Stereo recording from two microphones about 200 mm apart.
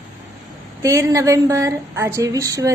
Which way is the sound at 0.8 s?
15° right (ahead or behind).